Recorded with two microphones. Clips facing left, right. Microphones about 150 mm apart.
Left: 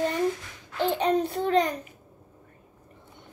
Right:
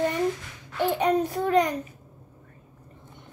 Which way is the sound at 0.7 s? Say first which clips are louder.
Right 1 dB; 10° right (ahead or behind).